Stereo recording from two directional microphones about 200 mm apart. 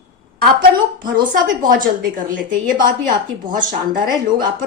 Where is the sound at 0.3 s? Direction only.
45° right (ahead or behind).